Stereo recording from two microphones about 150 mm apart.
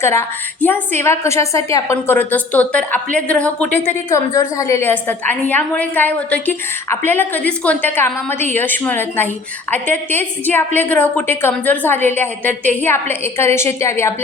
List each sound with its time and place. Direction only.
0.0 s a woman's voice: 15° left (ahead or behind)
4.1 s a woman's voice: 20° left (ahead or behind)